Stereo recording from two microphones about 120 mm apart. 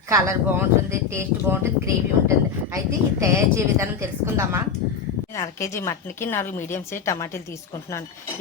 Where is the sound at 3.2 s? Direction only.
25° right (ahead or behind).